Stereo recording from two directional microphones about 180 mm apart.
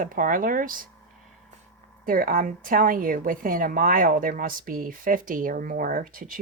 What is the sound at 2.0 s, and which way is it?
A woman's voice, 55° right (ahead or behind).